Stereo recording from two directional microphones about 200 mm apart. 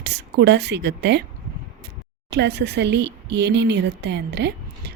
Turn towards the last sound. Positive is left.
turn(degrees=-55)  # may be behind; listen again after turning